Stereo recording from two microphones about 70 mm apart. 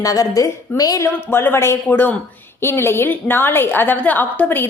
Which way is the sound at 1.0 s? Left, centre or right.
Left.